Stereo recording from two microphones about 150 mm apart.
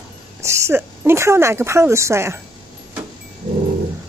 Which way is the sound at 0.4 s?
20° right (ahead or behind).